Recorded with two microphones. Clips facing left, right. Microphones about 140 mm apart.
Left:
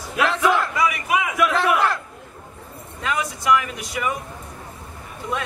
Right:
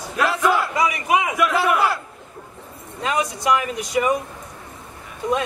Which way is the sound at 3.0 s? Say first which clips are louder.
Right 1 dB; 25° right (ahead or behind).